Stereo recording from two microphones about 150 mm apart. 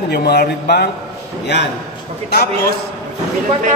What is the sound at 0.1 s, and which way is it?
Speech, 90° left.